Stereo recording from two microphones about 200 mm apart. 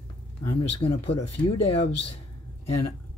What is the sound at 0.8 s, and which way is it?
Speech, 30° left (ahead or behind).